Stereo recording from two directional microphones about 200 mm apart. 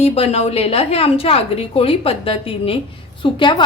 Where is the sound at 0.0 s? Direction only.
30° left (ahead or behind).